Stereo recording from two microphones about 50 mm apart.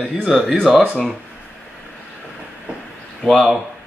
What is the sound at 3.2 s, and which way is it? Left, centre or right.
Speech, centre.